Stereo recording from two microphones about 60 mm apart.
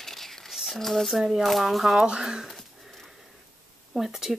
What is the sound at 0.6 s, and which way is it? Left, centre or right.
Speech, centre.